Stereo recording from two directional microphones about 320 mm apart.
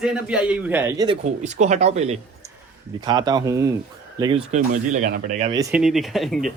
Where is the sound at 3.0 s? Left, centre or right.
Centre.